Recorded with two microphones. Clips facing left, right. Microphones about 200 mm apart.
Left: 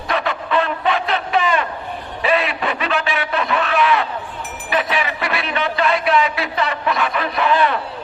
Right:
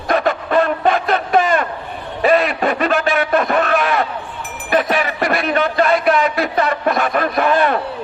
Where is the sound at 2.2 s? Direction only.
45° right (ahead or behind).